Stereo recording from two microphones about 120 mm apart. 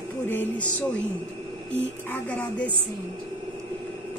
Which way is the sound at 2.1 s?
15° left (ahead or behind).